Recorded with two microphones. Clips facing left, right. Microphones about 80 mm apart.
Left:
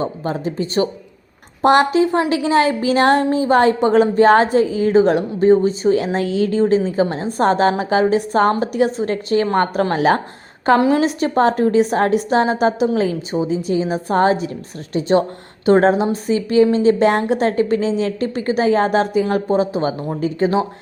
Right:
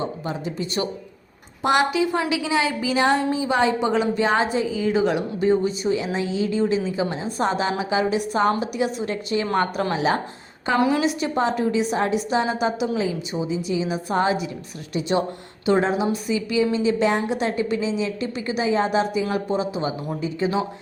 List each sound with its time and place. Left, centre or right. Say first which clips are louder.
0.0 s a woman's voice: left 6 dB; left
6.1 s a woman's voice: left 5 dB; left
10.8 s a woman's voice: left 5 dB; left
17.3 s a woman's voice: left 7 dB; left